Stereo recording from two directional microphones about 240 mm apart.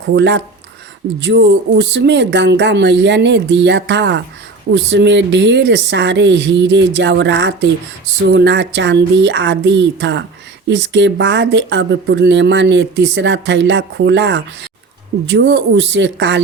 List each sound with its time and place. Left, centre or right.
0.1 s speech: right